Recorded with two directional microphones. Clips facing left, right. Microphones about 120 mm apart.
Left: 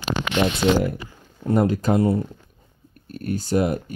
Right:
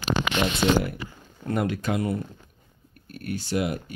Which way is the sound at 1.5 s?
35° left (ahead or behind).